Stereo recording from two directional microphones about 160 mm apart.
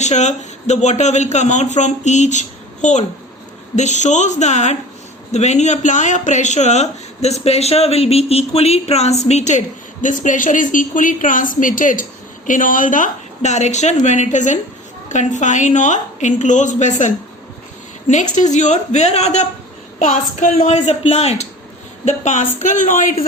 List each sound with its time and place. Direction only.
0.0 s speech: 45° left (ahead or behind)
3.8 s speech: 45° left (ahead or behind)
18.1 s speech: 50° left (ahead or behind)